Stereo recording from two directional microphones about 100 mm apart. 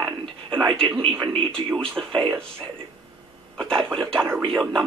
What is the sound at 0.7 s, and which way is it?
Speech, centre (ahead or behind).